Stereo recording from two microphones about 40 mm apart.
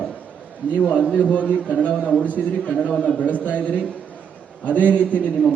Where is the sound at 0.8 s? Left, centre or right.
Left.